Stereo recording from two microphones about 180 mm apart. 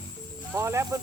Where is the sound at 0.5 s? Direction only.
15° right (ahead or behind).